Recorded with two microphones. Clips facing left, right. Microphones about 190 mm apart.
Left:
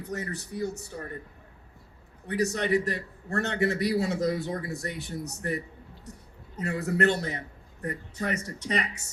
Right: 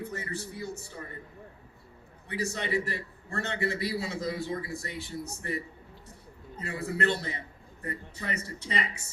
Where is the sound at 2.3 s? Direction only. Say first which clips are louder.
Left 5 dB; 70° left (ahead or behind).